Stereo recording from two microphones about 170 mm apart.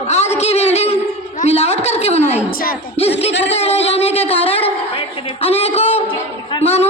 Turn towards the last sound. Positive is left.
turn(degrees=40)  # may be behind; listen again after turning